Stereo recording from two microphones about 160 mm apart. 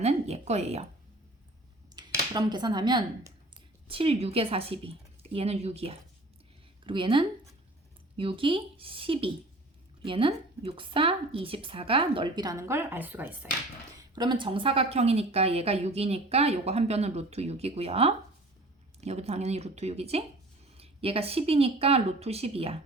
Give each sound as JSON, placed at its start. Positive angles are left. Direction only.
{"t": 0.0, "sound": "a sound", "side_deg": -40}
{"t": 2.0, "sound": "speech", "side_deg": -25}
{"t": 14.2, "sound": "speech", "side_deg": -30}